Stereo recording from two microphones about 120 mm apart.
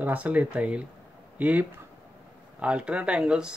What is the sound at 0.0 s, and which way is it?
Speech, 10° right (ahead or behind).